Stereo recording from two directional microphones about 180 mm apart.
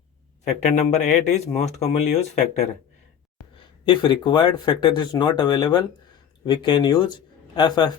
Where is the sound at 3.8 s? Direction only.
25° left (ahead or behind).